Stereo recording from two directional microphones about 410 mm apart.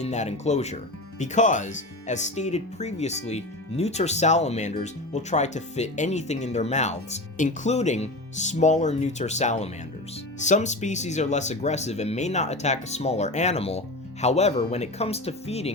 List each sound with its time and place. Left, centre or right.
0.0 s speech: centre